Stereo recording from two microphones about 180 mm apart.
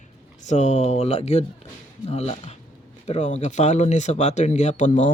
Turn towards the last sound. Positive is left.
turn(degrees=40)  # may be behind; listen again after turning